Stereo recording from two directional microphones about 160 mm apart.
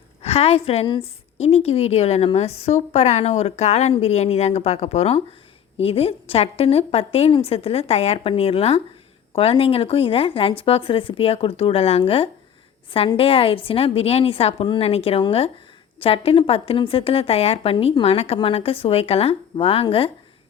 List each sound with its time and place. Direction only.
0.2 s a woman's voice: 40° left (ahead or behind)